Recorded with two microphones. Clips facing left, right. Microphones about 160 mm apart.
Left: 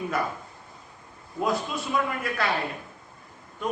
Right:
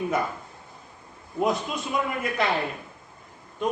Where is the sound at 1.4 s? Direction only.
20° right (ahead or behind).